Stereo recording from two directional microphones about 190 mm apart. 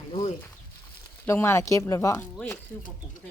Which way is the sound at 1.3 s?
15° left (ahead or behind).